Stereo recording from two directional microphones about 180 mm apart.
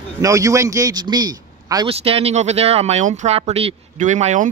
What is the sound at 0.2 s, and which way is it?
A man's voice, 15° right (ahead or behind).